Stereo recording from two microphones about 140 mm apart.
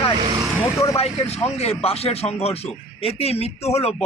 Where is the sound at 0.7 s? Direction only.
20° left (ahead or behind).